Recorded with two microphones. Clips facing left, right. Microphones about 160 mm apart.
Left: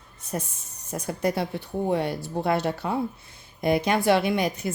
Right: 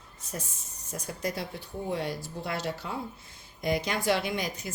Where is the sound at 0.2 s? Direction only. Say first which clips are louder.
Left 7 dB; 60° left (ahead or behind).